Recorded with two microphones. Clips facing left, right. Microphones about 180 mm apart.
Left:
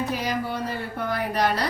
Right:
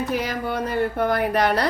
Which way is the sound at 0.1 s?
55° right (ahead or behind).